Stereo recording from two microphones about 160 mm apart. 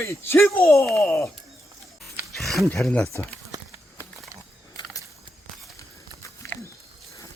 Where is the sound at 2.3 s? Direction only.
Centre (ahead or behind).